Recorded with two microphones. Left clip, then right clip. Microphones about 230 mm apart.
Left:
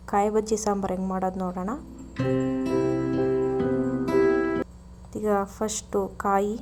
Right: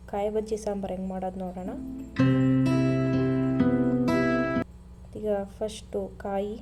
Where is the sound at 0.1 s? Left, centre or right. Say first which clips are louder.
Left 5 dB; left.